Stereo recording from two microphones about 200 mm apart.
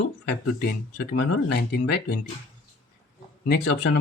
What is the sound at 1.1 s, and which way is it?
Speech, 60° left (ahead or behind).